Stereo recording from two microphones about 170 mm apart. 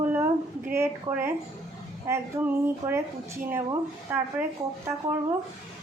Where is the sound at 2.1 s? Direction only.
15° right (ahead or behind).